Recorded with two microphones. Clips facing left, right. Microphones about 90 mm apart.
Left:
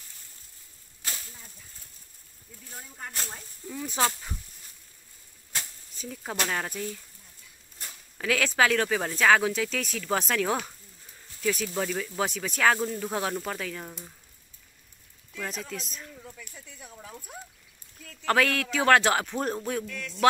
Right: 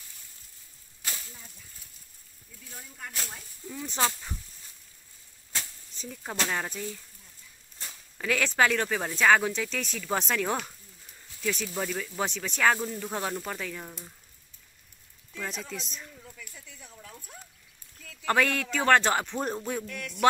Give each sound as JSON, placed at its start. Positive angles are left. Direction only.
{"t": 1.1, "sound": "a sound", "side_deg": 10}
{"t": 3.1, "sound": "speech", "side_deg": 0}
{"t": 3.6, "sound": "speech", "side_deg": -15}
{"t": 5.9, "sound": "speech", "side_deg": 0}
{"t": 8.2, "sound": "speech", "side_deg": 0}
{"t": 15.3, "sound": "speech", "side_deg": 0}
{"t": 16.2, "sound": "a sound", "side_deg": 15}
{"t": 16.5, "sound": "speech", "side_deg": 5}
{"t": 16.9, "sound": "speech", "side_deg": 15}
{"t": 17.9, "sound": "speech", "side_deg": 0}